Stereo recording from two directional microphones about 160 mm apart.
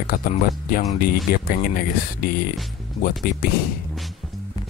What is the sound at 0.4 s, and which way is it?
Speech, 65° left (ahead or behind).